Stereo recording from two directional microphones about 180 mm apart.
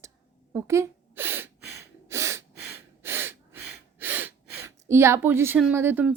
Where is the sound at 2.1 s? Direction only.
15° right (ahead or behind).